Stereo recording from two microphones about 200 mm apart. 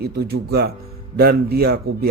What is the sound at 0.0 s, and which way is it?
A man's voice, 50° right (ahead or behind).